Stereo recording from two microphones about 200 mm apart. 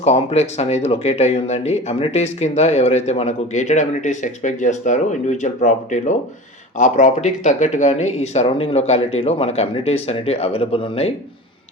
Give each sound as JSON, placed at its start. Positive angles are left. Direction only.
{"t": 0.0, "sound": "speech", "side_deg": 30}